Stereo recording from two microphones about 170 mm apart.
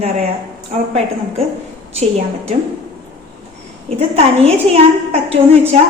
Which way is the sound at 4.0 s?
35° right (ahead or behind).